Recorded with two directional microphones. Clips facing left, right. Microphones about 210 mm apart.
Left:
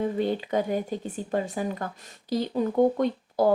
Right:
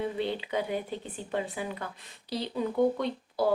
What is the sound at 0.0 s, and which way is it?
Speech, 45° left (ahead or behind).